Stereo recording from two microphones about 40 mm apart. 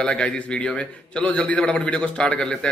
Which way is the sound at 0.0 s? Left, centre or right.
Left.